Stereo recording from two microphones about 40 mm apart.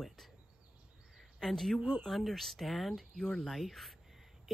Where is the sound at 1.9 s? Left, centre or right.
Centre.